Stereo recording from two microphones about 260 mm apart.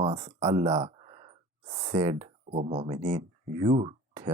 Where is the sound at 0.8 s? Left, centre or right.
Right.